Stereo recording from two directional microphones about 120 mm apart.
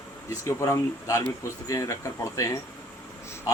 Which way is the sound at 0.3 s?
25° left (ahead or behind).